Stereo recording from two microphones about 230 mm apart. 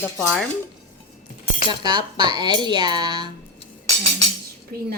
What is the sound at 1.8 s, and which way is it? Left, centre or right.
Speech, centre.